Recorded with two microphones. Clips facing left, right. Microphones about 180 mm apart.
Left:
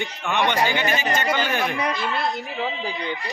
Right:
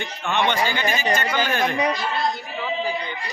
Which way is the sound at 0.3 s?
15° left (ahead or behind).